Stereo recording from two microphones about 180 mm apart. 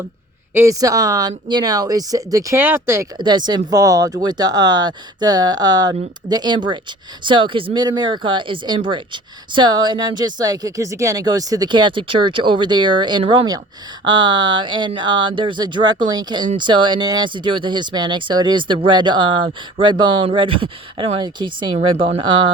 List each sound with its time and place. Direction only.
0.5 s speech: 15° right (ahead or behind)
3.2 s speech: 25° right (ahead or behind)